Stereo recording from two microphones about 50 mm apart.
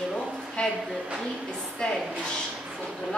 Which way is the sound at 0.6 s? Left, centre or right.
Centre.